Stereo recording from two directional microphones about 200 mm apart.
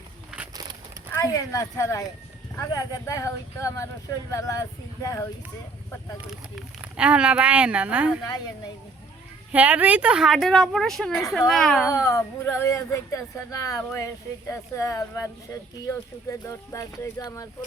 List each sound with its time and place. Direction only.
1.1 s speech: 15° left (ahead or behind)
6.6 s speech: 5° right (ahead or behind)
8.3 s speech: 20° left (ahead or behind)
9.5 s speech: 5° right (ahead or behind)
12.0 s speech: 15° left (ahead or behind)
16.5 s speech: 15° left (ahead or behind)